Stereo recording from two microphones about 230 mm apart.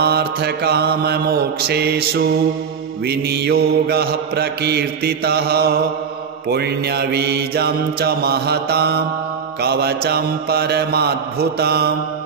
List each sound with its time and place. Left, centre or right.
0.0 s mantra: right